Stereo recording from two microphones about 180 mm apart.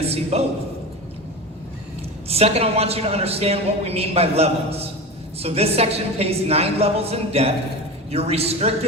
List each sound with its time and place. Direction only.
0.0 s a man's voice: 35° right (ahead or behind)
2.2 s a man's voice: 35° right (ahead or behind)